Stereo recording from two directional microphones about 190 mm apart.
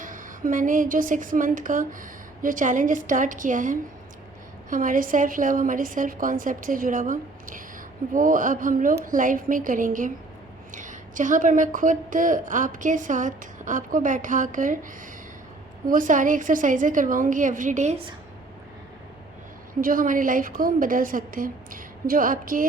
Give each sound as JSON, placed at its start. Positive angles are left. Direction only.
{"t": 0.0, "sound": "a woman's voice", "side_deg": -45}
{"t": 15.9, "sound": "a woman's voice", "side_deg": -45}
{"t": 19.8, "sound": "a woman's voice", "side_deg": -45}